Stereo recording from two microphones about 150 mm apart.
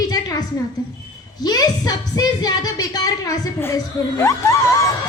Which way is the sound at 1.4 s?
25° left (ahead or behind).